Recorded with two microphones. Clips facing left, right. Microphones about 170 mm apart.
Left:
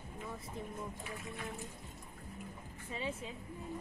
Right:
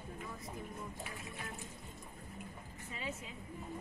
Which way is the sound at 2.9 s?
30° left (ahead or behind).